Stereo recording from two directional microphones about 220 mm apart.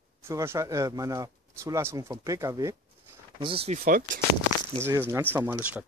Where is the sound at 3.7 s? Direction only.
40° right (ahead or behind).